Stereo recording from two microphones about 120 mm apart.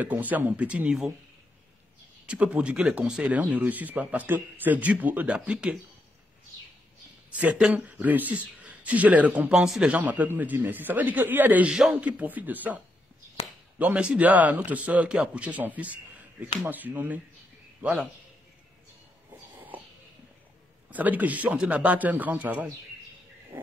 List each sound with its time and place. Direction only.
0.0 s speech: 15° right (ahead or behind)
2.2 s speech: 10° right (ahead or behind)
7.3 s speech: 10° right (ahead or behind)
20.9 s speech: 15° right (ahead or behind)
23.5 s a sound: 20° right (ahead or behind)